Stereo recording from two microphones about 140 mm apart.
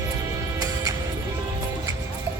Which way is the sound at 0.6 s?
25° right (ahead or behind).